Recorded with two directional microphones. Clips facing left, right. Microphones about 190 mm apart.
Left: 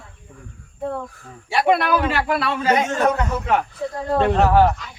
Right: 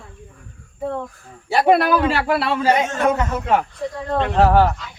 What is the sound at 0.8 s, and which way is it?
Speech, 5° right (ahead or behind).